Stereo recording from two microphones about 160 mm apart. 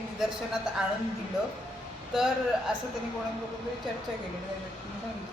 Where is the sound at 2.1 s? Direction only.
5° right (ahead or behind).